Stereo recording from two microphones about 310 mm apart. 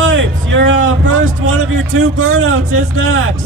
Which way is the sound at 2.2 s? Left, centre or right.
Right.